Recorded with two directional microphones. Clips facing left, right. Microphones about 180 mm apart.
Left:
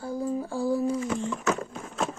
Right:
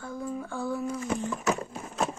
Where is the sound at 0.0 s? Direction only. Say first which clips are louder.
Left 5 dB; 35° left (ahead or behind).